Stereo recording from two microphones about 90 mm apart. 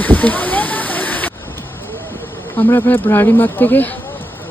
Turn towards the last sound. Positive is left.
turn(degrees=20)  # may be behind; listen again after turning